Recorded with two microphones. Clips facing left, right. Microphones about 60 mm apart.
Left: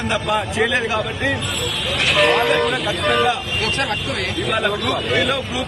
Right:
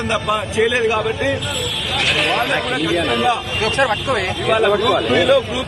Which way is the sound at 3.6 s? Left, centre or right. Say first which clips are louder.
Right 5 dB; right.